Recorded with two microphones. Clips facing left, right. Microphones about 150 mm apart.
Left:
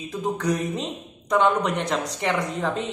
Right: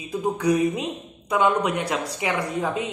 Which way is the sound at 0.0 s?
10° right (ahead or behind).